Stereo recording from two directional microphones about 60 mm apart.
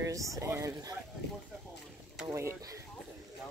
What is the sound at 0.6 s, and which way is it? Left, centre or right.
Speech, right.